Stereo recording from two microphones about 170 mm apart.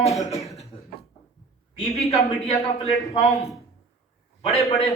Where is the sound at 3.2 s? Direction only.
Centre (ahead or behind).